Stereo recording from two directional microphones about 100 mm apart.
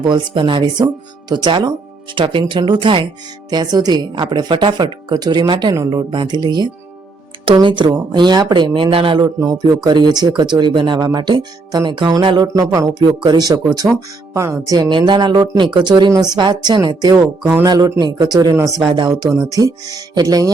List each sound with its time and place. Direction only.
0.0 s speech: 50° right (ahead or behind)
9.2 s speech: 40° right (ahead or behind)
12.5 s speech: 35° right (ahead or behind)
14.8 s speech: 50° right (ahead or behind)
18.8 s speech: 55° right (ahead or behind)
19.4 s speech: 35° right (ahead or behind)